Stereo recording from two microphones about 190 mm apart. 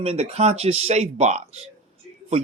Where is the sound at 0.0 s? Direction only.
35° right (ahead or behind).